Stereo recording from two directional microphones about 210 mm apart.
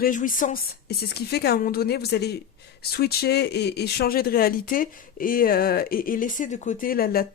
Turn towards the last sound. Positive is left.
turn(degrees=45)  # may be behind; listen again after turning